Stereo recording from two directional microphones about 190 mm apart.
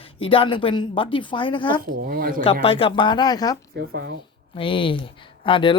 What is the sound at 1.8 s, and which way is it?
Speech, 50° right (ahead or behind).